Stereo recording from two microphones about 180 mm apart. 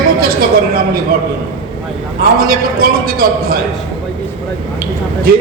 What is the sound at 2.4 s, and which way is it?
A man's voice, 55° right (ahead or behind).